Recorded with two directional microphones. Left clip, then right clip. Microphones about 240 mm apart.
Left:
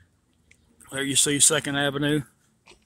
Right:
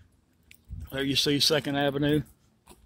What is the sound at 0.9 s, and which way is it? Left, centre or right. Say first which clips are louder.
Speech: left 2 dB; centre.